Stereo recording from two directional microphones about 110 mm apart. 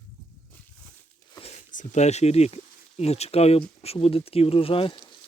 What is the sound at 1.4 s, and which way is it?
Speech, 80° left.